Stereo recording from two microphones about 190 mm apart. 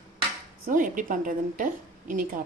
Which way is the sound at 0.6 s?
45° right (ahead or behind).